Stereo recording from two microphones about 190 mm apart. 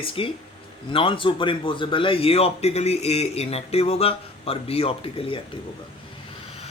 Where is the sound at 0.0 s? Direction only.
30° left (ahead or behind).